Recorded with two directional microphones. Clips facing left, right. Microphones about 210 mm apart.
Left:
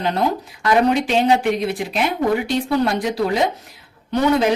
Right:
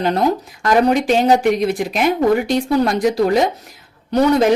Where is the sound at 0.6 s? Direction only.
45° right (ahead or behind).